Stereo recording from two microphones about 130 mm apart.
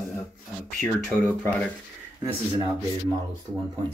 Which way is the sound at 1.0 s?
10° left (ahead or behind).